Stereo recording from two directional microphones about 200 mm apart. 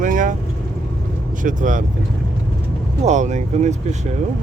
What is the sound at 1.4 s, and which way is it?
Speech, 40° right (ahead or behind).